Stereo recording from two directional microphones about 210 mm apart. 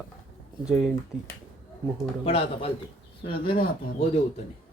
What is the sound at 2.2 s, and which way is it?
Speech, 25° left (ahead or behind).